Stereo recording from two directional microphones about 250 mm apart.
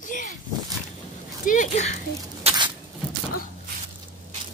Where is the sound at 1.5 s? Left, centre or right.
Left.